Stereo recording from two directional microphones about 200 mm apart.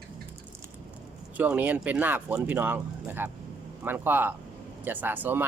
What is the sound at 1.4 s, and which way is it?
Speech, 10° right (ahead or behind).